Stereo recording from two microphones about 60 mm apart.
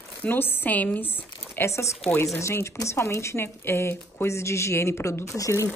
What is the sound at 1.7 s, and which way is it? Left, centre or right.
Speech, left.